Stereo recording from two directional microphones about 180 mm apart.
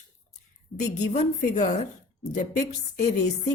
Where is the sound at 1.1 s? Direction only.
40° left (ahead or behind).